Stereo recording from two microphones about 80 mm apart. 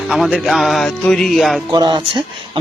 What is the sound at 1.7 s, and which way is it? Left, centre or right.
Speech, right.